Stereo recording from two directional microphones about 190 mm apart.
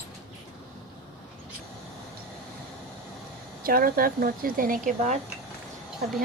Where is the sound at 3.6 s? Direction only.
50° right (ahead or behind).